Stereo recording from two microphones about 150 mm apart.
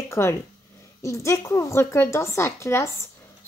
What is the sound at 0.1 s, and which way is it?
A woman's voice, 20° left (ahead or behind).